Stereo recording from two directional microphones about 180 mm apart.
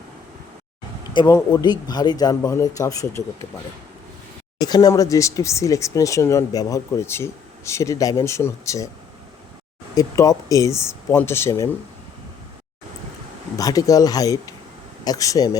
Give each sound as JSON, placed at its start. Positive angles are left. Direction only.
{"t": 1.1, "sound": "speech", "side_deg": 25}
{"t": 4.6, "sound": "speech", "side_deg": 20}
{"t": 9.9, "sound": "speech", "side_deg": 20}
{"t": 13.6, "sound": "speech", "side_deg": 20}